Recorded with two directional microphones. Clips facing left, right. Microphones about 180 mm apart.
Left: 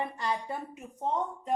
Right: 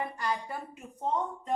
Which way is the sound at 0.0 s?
25° left (ahead or behind).